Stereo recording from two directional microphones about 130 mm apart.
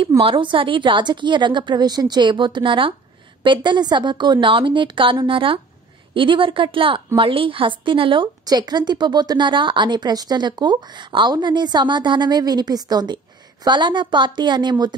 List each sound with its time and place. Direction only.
0.2 s a woman's voice: 40° right (ahead or behind)